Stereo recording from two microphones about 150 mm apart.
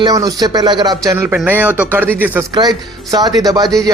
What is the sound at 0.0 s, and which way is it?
Speech, 25° right (ahead or behind).